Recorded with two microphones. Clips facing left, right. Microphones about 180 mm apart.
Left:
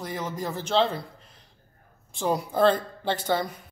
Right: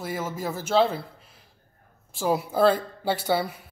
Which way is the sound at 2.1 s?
5° right (ahead or behind).